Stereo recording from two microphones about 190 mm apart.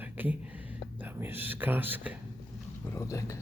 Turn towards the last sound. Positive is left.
turn(degrees=15)  # may be behind; listen again after turning